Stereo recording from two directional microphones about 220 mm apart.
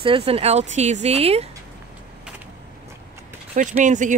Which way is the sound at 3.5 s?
35° right (ahead or behind).